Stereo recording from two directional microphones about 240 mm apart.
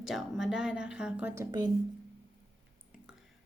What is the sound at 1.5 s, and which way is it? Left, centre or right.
Speech, centre.